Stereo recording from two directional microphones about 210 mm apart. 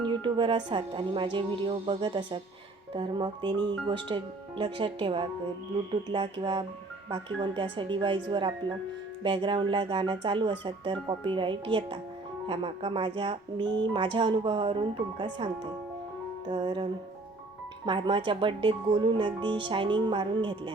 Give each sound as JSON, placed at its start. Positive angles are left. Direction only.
{"t": 0.0, "sound": "speech", "side_deg": -20}
{"t": 16.5, "sound": "speech", "side_deg": -20}
{"t": 17.8, "sound": "speech", "side_deg": -25}